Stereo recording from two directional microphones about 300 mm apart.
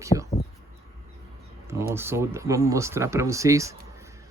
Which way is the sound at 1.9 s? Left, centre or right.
Centre.